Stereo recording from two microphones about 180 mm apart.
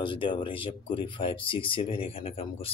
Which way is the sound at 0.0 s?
25° left (ahead or behind).